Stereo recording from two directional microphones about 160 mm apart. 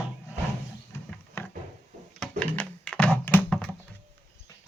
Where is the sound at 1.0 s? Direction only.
15° left (ahead or behind).